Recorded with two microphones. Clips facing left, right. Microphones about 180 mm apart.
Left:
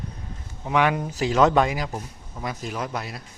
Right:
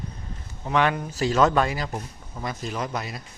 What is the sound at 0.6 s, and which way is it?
Speech, 10° left (ahead or behind).